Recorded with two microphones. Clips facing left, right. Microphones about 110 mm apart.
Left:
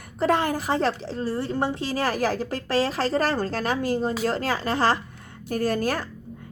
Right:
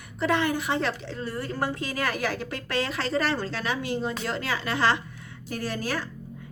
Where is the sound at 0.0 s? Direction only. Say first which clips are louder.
Left 3 dB; 40° left (ahead or behind).